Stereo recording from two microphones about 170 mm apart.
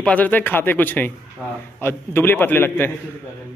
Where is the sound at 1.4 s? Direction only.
10° right (ahead or behind).